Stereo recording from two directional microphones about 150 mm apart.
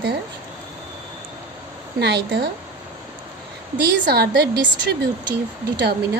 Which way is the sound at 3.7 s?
85° right.